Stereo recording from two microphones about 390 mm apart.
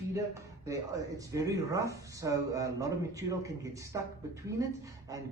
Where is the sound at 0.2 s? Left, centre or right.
Centre.